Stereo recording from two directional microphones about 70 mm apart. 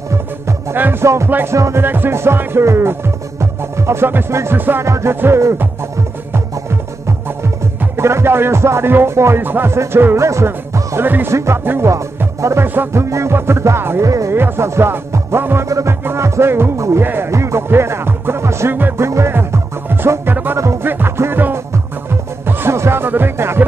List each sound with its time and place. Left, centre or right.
0.1 s music: right
0.7 s music: right
1.0 s music: right
4.6 s music: right
4.8 s music: right
11.1 s music: right
11.3 s music: right
12.4 s music: right
12.6 s music: right
13.1 s music: right
14.0 s music: right
14.3 s music: right
17.0 s music: right
17.3 s music: right